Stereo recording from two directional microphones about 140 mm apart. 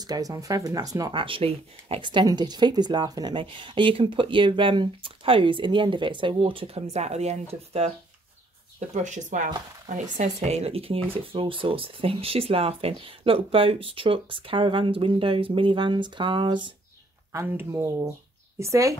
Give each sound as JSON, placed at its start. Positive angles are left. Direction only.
{"t": 0.0, "sound": "speech", "side_deg": -25}
{"t": 1.1, "sound": "speech", "side_deg": -40}
{"t": 8.7, "sound": "speech", "side_deg": -60}
{"t": 17.3, "sound": "speech", "side_deg": -20}